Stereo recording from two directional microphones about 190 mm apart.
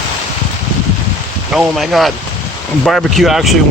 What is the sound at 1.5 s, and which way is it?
Speech, centre (ahead or behind).